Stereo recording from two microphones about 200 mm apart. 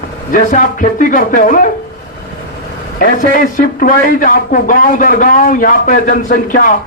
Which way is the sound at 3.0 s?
45° left (ahead or behind).